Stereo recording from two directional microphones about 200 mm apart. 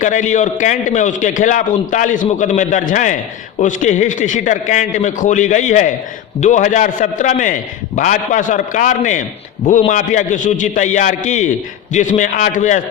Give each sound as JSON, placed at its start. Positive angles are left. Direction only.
{"t": 0.0, "sound": "a man's voice", "side_deg": 40}